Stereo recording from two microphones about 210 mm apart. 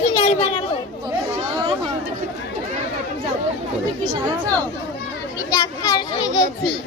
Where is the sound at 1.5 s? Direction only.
20° right (ahead or behind).